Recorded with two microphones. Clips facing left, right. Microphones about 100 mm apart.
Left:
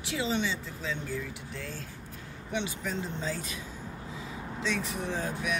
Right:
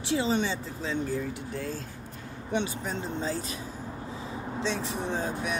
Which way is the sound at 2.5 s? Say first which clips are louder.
Right 3 dB; 35° right (ahead or behind).